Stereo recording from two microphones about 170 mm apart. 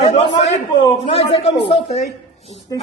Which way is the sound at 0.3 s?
40° left (ahead or behind).